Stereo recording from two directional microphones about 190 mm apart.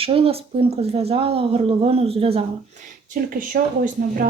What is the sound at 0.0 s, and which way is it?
Speech, 30° right (ahead or behind).